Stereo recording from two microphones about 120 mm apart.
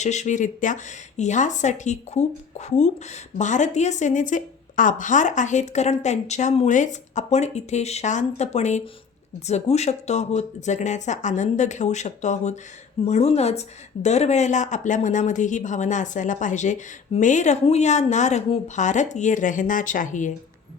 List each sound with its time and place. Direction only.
0.0 s speech: 80° left
13.1 s a woman's voice: 60° left (ahead or behind); by 20.3 s 90° left